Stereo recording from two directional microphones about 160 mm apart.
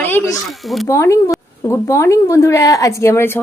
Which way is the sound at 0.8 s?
20° left (ahead or behind).